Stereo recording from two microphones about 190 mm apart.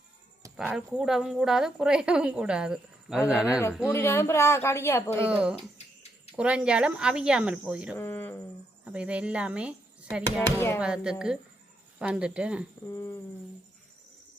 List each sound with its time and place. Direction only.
0.5 s a woman's voice: 5° right (ahead or behind)
3.9 s speech: 15° left (ahead or behind)
5.2 s speech: 5° right (ahead or behind)
5.7 s insect: 35° left (ahead or behind)
6.3 s a woman's voice: 5° right (ahead or behind)
7.9 s speech: 10° left (ahead or behind)
8.8 s a woman's voice: 5° right (ahead or behind)
12.9 s speech: 15° left (ahead or behind)